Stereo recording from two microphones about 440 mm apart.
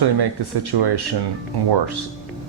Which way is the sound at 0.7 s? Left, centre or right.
Right.